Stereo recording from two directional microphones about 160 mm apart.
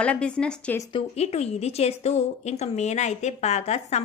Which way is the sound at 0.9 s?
40° left (ahead or behind).